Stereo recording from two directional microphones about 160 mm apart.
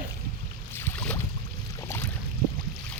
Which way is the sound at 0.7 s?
15° left (ahead or behind).